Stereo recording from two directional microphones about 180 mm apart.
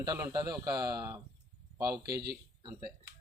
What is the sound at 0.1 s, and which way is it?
A man's voice, 15° right (ahead or behind).